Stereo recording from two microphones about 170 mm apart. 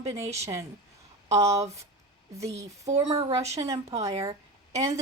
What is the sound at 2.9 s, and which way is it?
Speech, 40° right (ahead or behind).